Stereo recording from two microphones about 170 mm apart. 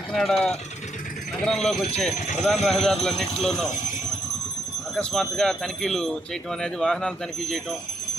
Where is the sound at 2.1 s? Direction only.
45° left (ahead or behind).